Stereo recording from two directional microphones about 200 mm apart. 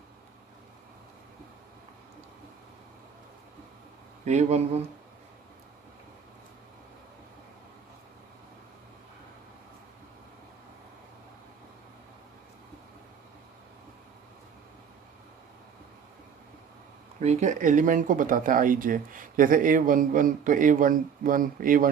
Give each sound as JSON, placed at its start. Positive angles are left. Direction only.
{"t": 4.3, "sound": "speech", "side_deg": -35}
{"t": 17.2, "sound": "speech", "side_deg": -35}